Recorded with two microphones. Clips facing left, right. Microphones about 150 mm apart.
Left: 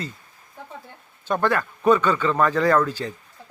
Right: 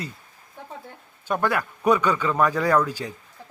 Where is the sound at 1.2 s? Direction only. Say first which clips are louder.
Left 2 dB; 10° right (ahead or behind).